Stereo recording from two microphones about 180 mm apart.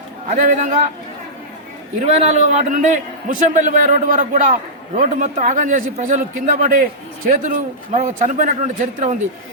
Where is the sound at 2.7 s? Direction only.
45° right (ahead or behind).